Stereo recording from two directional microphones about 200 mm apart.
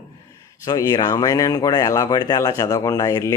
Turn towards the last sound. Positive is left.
turn(degrees=20)  # may be behind; listen again after turning